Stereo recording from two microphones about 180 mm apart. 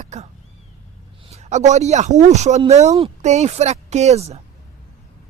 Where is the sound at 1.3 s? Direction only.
40° right (ahead or behind).